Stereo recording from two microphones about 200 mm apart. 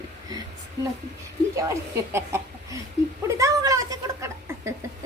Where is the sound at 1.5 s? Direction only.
15° right (ahead or behind).